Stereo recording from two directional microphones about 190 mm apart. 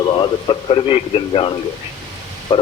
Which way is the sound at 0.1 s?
25° left (ahead or behind).